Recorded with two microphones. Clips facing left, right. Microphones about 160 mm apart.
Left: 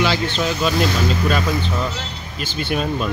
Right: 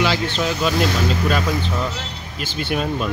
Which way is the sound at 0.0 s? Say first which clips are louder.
Left 1 dB; 5° right (ahead or behind).